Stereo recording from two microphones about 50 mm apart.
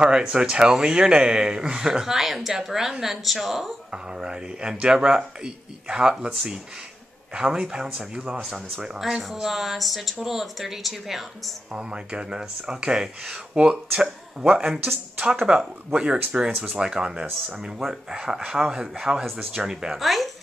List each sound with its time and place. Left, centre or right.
0.0 s speech: centre
3.9 s speech: centre
11.7 s speech: centre
14.6 s speech: centre
15.4 s speech: centre
20.0 s speech: centre